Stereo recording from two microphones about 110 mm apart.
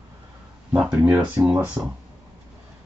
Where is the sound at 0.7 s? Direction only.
15° right (ahead or behind).